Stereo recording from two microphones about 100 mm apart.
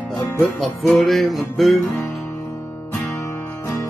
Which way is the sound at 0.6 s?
Centre (ahead or behind).